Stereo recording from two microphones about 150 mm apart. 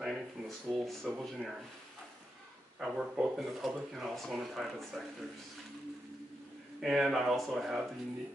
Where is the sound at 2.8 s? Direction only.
5° right (ahead or behind).